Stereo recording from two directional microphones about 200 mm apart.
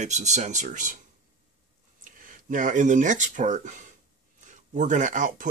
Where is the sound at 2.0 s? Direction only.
40° right (ahead or behind).